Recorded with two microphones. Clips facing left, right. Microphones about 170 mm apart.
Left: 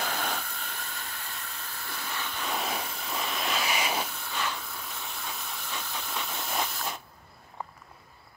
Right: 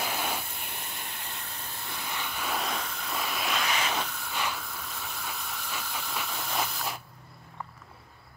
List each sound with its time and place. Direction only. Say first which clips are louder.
0.0 s a sound: even; 10° right (ahead or behind)
1.2 s steam: even; 30° right (ahead or behind)
1.9 s vehicle: even; 15° right (ahead or behind)
3.6 s hiss: even; 10° left (ahead or behind)
4.3 s hiss: right 1 dB; 10° right (ahead or behind)
4.6 s steam: right 1 dB; centre (ahead or behind)